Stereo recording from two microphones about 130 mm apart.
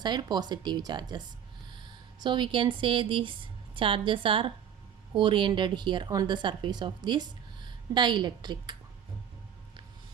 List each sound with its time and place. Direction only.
0.0 s speech: 35° right (ahead or behind)
2.2 s speech: 35° right (ahead or behind)